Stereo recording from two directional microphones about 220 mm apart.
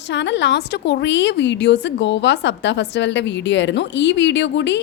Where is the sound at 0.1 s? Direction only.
55° left (ahead or behind).